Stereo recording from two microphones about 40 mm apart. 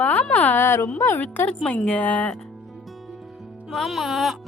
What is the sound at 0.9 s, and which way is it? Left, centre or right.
Speech, left.